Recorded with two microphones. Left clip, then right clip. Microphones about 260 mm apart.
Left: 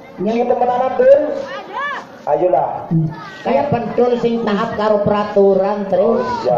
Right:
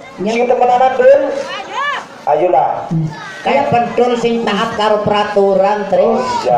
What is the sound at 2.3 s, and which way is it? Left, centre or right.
Speech, right.